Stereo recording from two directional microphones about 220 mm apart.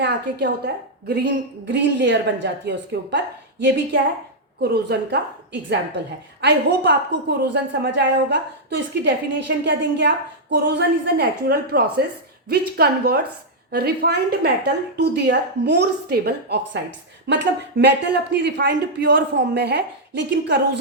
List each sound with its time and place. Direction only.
0.0 s speech: 50° right (ahead or behind)
4.6 s speech: 50° right (ahead or behind)